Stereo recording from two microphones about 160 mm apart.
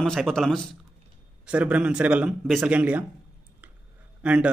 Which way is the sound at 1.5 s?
10° right (ahead or behind).